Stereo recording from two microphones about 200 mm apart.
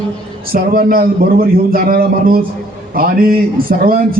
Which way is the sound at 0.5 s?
45° right (ahead or behind).